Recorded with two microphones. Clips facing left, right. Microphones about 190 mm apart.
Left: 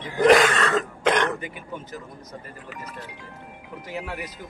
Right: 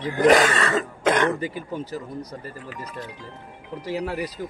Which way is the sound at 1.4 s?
35° right (ahead or behind).